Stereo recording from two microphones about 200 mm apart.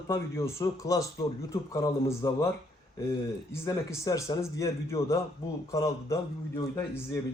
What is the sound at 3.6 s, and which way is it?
Speech, 15° left (ahead or behind).